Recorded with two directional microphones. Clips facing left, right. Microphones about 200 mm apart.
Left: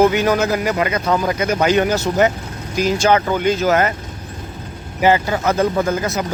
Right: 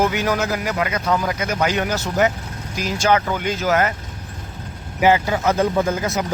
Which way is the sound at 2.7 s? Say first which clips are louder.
Left 4 dB; 5° right (ahead or behind).